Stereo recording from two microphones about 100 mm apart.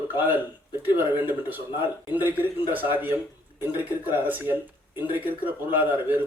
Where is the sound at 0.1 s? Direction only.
20° right (ahead or behind).